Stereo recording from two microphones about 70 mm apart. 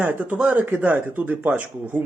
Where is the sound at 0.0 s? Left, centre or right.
Right.